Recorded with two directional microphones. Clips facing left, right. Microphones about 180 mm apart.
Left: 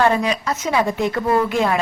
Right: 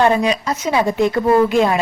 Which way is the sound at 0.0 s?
15° right (ahead or behind).